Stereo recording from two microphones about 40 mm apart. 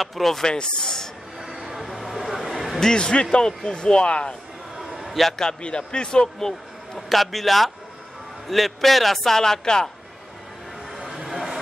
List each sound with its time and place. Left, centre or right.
0.0 s a man's voice: centre
0.5 s speech: centre
1.4 s a sound: centre
2.8 s speech: centre
4.7 s a sound: centre
5.4 s speech: left
7.1 s a man's voice: centre
11.0 s vehicle: centre